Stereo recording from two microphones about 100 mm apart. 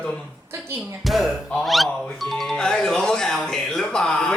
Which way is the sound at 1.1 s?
Centre (ahead or behind).